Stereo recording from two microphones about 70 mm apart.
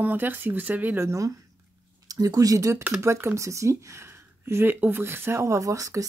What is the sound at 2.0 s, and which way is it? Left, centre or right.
Speech, right.